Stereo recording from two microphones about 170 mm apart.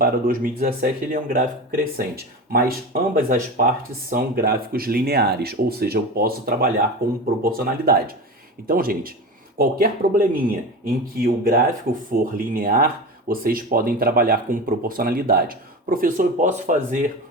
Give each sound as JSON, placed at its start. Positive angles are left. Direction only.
{"t": 0.0, "sound": "speech", "side_deg": -60}